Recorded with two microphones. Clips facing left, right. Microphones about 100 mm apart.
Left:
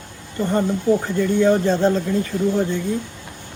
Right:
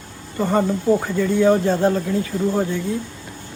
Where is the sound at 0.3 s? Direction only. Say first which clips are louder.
Right 1 dB; 15° right (ahead or behind).